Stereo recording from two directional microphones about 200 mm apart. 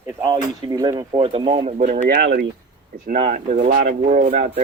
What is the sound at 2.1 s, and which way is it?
Speech, 55° right (ahead or behind).